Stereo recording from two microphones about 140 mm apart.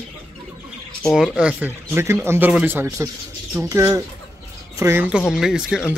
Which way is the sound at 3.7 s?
20° right (ahead or behind).